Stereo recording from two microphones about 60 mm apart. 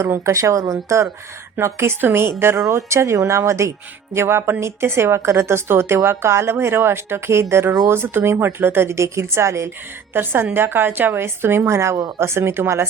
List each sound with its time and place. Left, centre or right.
0.1 s speech: right
1.6 s a woman's voice: right
2.6 s a woman's voice: right
10.2 s a woman's voice: right